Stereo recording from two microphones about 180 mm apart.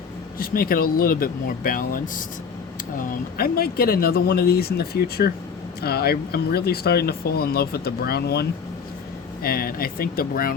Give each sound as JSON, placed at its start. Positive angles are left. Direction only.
{"t": 0.3, "sound": "speech", "side_deg": 55}